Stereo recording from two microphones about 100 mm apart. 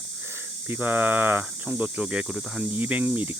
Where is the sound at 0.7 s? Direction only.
20° right (ahead or behind).